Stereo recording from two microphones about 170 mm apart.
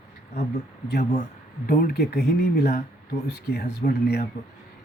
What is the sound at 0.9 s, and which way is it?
Speech, 75° left (ahead or behind).